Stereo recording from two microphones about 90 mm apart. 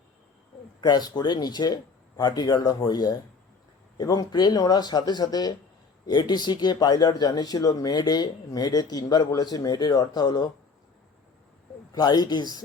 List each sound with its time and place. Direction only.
0.8 s speech: 50° left (ahead or behind)
11.9 s speech: 50° left (ahead or behind)